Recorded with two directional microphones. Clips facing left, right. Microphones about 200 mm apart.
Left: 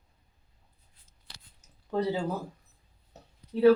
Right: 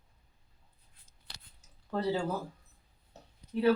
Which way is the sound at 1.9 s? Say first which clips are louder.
Left 3 dB; 15° left (ahead or behind).